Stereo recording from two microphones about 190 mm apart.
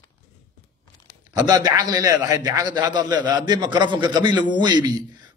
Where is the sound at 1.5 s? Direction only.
20° right (ahead or behind).